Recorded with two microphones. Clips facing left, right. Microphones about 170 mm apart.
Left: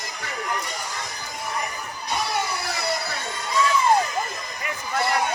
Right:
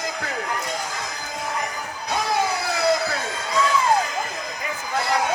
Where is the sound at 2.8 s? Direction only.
90° right.